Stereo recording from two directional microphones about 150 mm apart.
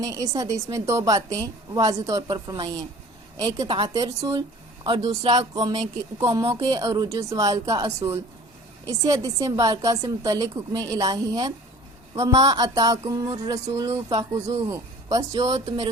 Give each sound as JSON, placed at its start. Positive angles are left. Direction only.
{"t": 0.0, "sound": "a woman's voice", "side_deg": -25}